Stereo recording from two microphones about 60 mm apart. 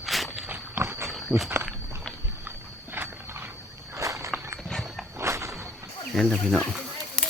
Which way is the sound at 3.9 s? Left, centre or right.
Right.